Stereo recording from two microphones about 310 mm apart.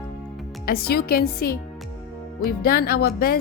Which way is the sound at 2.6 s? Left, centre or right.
Left.